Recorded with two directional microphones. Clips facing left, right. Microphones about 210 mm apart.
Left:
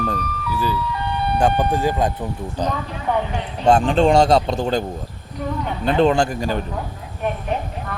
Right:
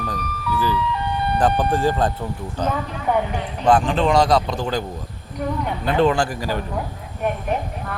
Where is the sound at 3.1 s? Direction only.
10° right (ahead or behind).